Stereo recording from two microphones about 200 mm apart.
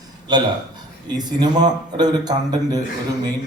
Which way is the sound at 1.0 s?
20° right (ahead or behind).